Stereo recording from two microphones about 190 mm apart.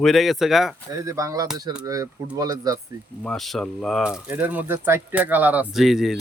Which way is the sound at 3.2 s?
Centre (ahead or behind).